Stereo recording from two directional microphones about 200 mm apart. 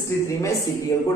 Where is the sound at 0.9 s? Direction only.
15° left (ahead or behind).